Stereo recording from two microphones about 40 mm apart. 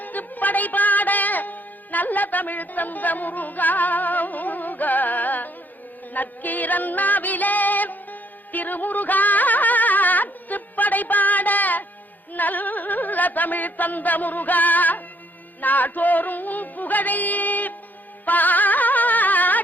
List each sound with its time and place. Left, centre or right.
0.0 s music: left
12.3 s carnatic music: left
18.3 s music: left